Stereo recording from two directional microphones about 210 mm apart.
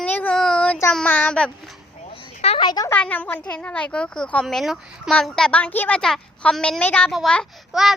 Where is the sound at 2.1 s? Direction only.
25° left (ahead or behind).